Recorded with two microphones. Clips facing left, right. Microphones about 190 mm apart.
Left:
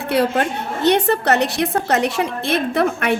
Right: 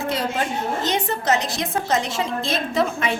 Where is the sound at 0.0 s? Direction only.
65° left (ahead or behind).